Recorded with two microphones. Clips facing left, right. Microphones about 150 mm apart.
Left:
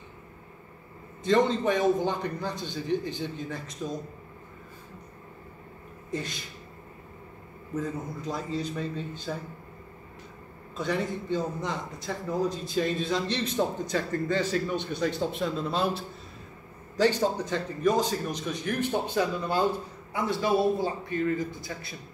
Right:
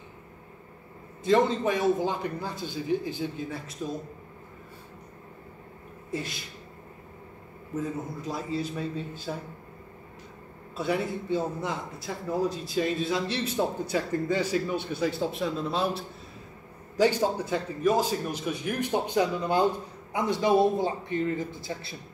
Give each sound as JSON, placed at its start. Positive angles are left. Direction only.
{"t": 1.2, "sound": "a man's voice", "side_deg": -5}
{"t": 6.1, "sound": "a man's voice", "side_deg": -5}
{"t": 7.7, "sound": "a man's voice", "side_deg": -5}
{"t": 10.8, "sound": "a man's voice", "side_deg": -5}